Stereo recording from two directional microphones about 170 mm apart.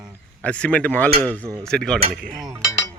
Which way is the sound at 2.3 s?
20° right (ahead or behind).